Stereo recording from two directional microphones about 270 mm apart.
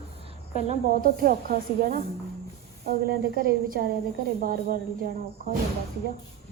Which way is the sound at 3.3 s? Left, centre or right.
Right.